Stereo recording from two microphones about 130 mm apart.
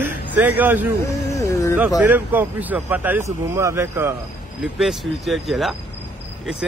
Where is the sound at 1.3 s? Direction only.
25° left (ahead or behind).